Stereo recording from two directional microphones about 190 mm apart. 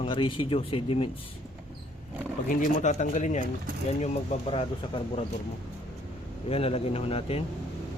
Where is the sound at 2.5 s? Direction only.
40° left (ahead or behind).